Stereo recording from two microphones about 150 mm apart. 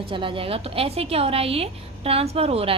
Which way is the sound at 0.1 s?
35° right (ahead or behind).